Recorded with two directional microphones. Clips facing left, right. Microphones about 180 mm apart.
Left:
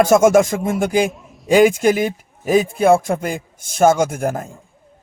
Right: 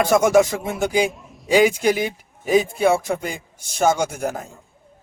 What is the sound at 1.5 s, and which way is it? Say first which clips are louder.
A man's voice: left 4 dB; 50° left (ahead or behind).